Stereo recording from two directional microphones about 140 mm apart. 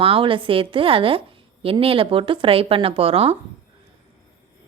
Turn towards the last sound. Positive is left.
turn(degrees=-45)  # may be behind; listen again after turning